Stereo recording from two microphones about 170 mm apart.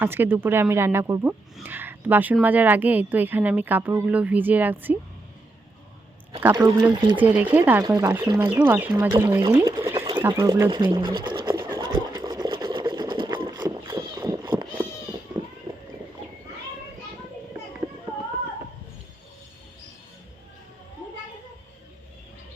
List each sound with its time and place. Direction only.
0.0 s speech: 15° right (ahead or behind)
6.5 s speech: 25° right (ahead or behind)
7.2 s speech: 10° right (ahead or behind)
8.4 s speech: 10° right (ahead or behind)
9.1 s speech: 20° right (ahead or behind)
10.0 s a sound: 15° right (ahead or behind)
10.4 s speech: 20° right (ahead or behind)
11.3 s sewing machine: 30° right (ahead or behind)
15.7 s run: 25° right (ahead or behind)